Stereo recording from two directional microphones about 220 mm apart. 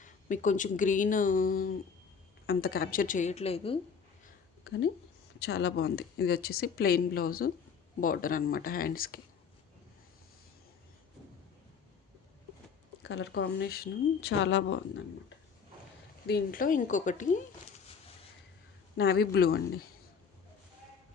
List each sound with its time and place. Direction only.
0.0 s speech: 35° left (ahead or behind)
4.6 s speech: 50° left (ahead or behind)
13.0 s speech: 55° left (ahead or behind)
16.2 s speech: 45° left (ahead or behind)
18.9 s speech: 45° left (ahead or behind)